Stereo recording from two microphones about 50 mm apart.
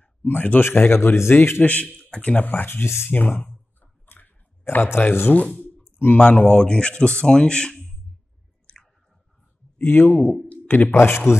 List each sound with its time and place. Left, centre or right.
0.0 s speech: left
0.7 s a man's voice: left
1.6 s speech: left
2.0 s a sound: left
2.3 s speech: left
2.8 s a man's voice: left
3.1 s clicking: left
4.8 s a man's voice: left
5.3 s speech: left; by 7.8 s centre
8.7 s chewing: centre
9.8 s speech: left
10.2 s speech: centre
10.9 s a man's voice: left